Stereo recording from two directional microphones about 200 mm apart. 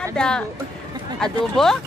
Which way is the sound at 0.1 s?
5° left (ahead or behind).